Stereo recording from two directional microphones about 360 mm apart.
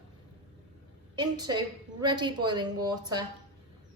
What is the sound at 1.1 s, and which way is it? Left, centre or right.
A woman's voice, centre.